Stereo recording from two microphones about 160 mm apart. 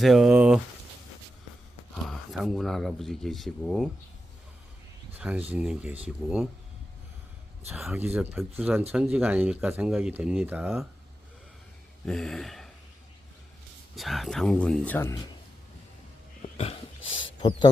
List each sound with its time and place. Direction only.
0.0 s speech: centre (ahead or behind)
2.0 s speech: centre (ahead or behind)
5.2 s speech: 10° right (ahead or behind)
7.7 s speech: 10° right (ahead or behind)
12.0 s speech: 5° left (ahead or behind)
13.9 s speech: centre (ahead or behind)
16.6 s a sound: 35° left (ahead or behind)